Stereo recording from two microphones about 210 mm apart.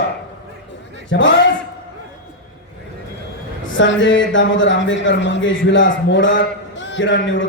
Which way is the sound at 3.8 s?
60° left (ahead or behind).